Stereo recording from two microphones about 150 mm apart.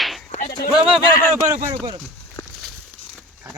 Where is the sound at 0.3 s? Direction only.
55° left (ahead or behind).